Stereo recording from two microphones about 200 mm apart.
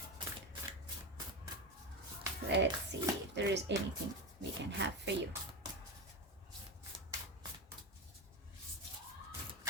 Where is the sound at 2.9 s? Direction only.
60° right (ahead or behind).